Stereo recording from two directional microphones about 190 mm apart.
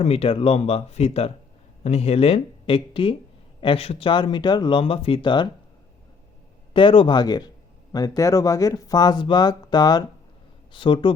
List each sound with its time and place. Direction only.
0.0 s speech: 30° left (ahead or behind)
6.7 s speech: 25° left (ahead or behind)